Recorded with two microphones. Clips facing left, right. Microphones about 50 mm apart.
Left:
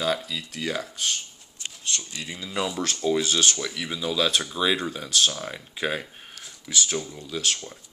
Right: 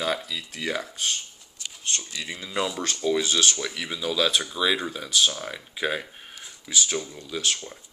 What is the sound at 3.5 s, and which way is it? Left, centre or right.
Speech, right.